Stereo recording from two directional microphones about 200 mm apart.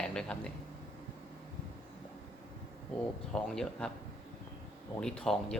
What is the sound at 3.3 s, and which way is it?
Speech, 5° left (ahead or behind).